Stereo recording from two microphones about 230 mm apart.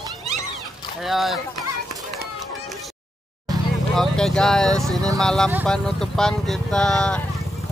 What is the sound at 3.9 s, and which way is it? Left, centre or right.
Speech, centre.